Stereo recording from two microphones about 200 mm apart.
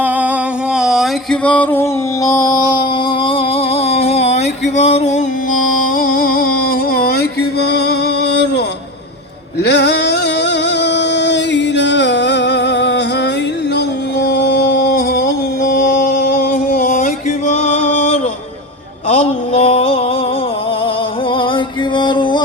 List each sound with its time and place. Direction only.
0.7 s music: centre (ahead or behind); by 2.6 s 15° left (ahead or behind)
3.2 s a sound: 30° left (ahead or behind)
4.8 s music: 35° left (ahead or behind)
6.0 s music: 45° left (ahead or behind)
9.6 s music: 60° left (ahead or behind)
13.7 s a sound: 55° left (ahead or behind)
15.7 s music: 50° left (ahead or behind)
19.0 s a sound: 35° left (ahead or behind)
21.3 s music: 25° left (ahead or behind)